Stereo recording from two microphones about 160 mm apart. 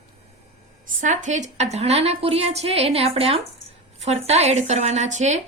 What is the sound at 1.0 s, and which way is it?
A woman's voice, 50° right (ahead or behind).